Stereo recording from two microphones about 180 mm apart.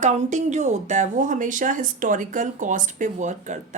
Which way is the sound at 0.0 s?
40° right (ahead or behind).